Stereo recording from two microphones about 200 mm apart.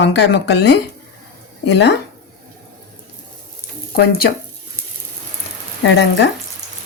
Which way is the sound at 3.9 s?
50° left (ahead or behind).